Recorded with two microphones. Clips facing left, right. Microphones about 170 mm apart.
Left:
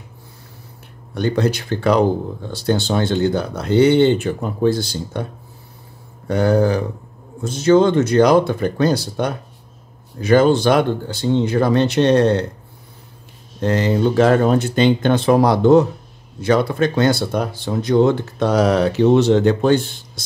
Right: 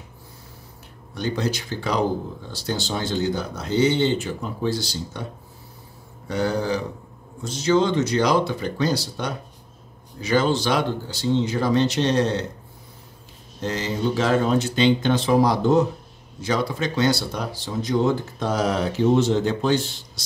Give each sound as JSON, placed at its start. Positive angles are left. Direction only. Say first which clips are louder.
{"t": 1.1, "sound": "speech", "louder": "left 7 dB", "side_deg": 60}
{"t": 6.2, "sound": "speech", "louder": "left 8 dB", "side_deg": 55}
{"t": 13.6, "sound": "speech", "louder": "left 8 dB", "side_deg": 60}